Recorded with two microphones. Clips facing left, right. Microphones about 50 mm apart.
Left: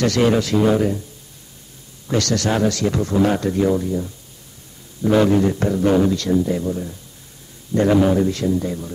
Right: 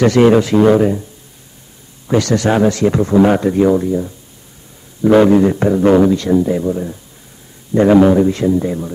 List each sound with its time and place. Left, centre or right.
0.0 s a man's voice: right
2.0 s a man's voice: centre